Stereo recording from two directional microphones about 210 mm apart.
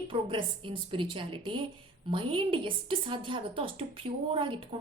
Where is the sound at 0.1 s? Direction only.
25° right (ahead or behind).